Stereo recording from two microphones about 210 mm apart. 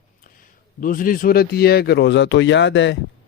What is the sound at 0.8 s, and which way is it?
Speech, 40° left (ahead or behind).